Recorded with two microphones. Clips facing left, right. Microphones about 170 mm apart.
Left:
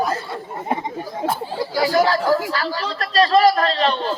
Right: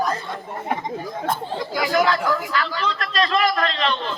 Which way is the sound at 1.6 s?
35° left (ahead or behind).